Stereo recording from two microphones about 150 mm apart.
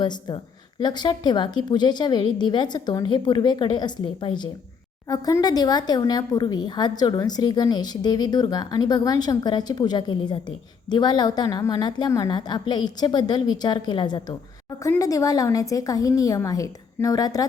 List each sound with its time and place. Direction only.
0.0 s speech: 30° left (ahead or behind)